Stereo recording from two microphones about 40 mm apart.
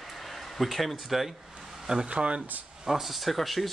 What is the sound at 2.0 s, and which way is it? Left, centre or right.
Speech, right.